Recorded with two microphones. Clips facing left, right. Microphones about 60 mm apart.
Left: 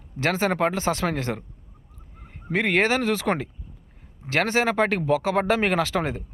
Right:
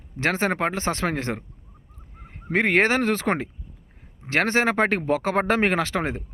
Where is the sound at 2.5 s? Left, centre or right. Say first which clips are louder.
Right 2 dB; right.